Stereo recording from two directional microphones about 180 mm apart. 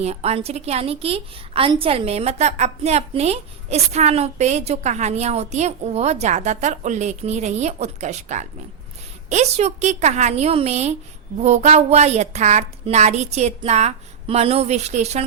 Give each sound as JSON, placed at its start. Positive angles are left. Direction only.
{"t": 0.0, "sound": "a woman's voice", "side_deg": -35}